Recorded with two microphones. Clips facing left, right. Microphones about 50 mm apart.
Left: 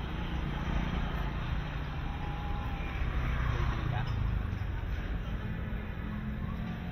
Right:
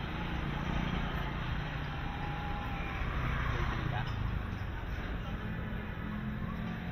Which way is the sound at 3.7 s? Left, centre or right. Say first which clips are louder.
Even; centre.